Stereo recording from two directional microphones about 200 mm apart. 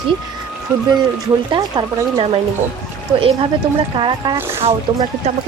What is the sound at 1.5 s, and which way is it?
Speech, 20° right (ahead or behind).